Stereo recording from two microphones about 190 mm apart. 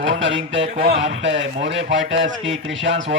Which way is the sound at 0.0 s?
70° right (ahead or behind).